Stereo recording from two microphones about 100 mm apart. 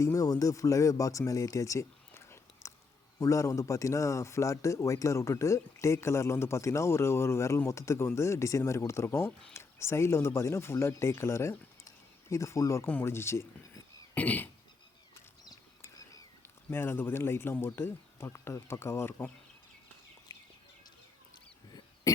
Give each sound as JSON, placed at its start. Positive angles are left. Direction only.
{"t": 0.0, "sound": "speech", "side_deg": 35}
{"t": 14.2, "sound": "cough", "side_deg": 15}
{"t": 16.6, "sound": "speech", "side_deg": 25}
{"t": 22.1, "sound": "a sound", "side_deg": 40}